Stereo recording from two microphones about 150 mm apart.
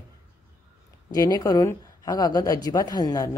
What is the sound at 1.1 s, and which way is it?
A woman's voice, 20° left (ahead or behind).